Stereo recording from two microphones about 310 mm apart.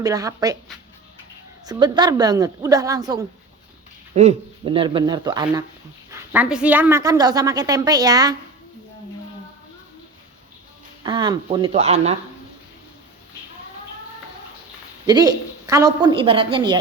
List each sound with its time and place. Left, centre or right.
0.0 s a woman's voice: centre
1.6 s a woman's voice: centre
11.0 s a woman's voice: centre
15.0 s a woman's voice: centre